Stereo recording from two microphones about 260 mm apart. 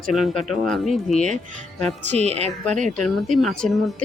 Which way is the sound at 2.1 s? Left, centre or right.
Right.